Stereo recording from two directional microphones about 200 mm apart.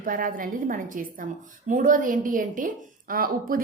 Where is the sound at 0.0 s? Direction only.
45° right (ahead or behind).